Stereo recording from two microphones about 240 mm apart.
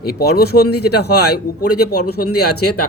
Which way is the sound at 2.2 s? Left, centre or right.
Left.